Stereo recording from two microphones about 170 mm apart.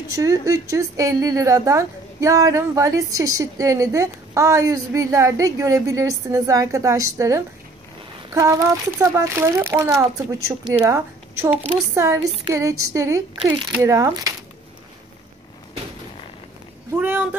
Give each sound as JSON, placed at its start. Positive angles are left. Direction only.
{"t": 0.1, "sound": "a woman's voice", "side_deg": -20}
{"t": 13.4, "sound": "a child's voice", "side_deg": -5}
{"t": 13.9, "sound": "a woman's voice", "side_deg": -20}
{"t": 16.9, "sound": "a child's voice", "side_deg": -10}